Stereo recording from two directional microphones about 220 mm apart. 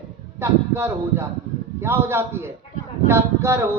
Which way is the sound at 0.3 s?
10° right (ahead or behind).